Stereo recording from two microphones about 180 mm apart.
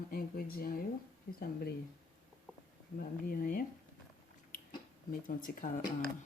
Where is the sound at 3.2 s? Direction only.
50° left (ahead or behind).